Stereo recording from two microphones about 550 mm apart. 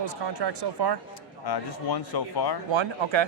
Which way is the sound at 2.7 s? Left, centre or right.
Right.